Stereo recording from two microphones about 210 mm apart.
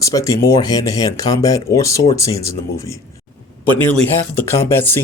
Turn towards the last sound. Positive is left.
turn(degrees=10)  # may be behind; listen again after turning